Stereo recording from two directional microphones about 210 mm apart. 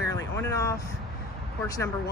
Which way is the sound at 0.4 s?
15° left (ahead or behind).